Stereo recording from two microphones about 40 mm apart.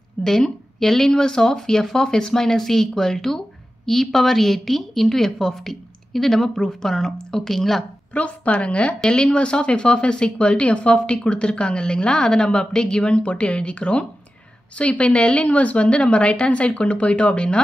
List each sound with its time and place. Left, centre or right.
0.2 s speech: centre
8.1 s a woman's voice: left